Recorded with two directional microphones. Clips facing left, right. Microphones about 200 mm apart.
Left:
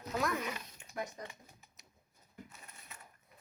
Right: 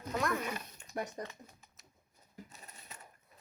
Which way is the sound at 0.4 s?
45° right (ahead or behind).